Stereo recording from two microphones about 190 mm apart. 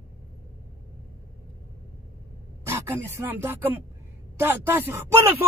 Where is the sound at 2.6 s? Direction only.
15° right (ahead or behind).